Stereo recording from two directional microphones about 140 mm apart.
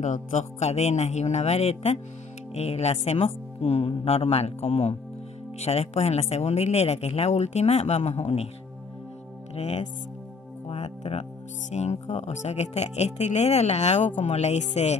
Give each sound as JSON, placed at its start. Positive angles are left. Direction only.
{"t": 0.0, "sound": "speech", "side_deg": 60}
{"t": 9.6, "sound": "speech", "side_deg": 50}
{"t": 10.7, "sound": "music", "side_deg": 50}
{"t": 11.7, "sound": "speech", "side_deg": 50}